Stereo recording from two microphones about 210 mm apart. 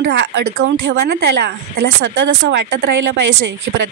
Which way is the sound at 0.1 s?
65° right (ahead or behind).